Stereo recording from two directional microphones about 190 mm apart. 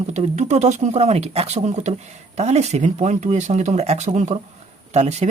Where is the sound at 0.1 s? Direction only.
35° right (ahead or behind).